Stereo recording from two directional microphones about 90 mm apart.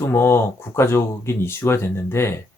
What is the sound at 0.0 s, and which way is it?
Speech, 30° left (ahead or behind).